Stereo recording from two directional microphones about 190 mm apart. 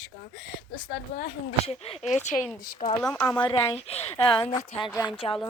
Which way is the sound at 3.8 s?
30° left (ahead or behind).